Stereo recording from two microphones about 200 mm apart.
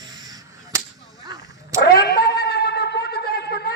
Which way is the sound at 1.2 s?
20° right (ahead or behind).